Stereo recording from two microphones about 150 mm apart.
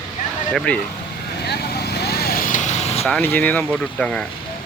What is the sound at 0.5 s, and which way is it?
Speech, 5° left (ahead or behind).